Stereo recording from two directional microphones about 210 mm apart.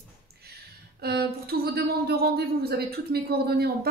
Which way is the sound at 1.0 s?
50° right (ahead or behind).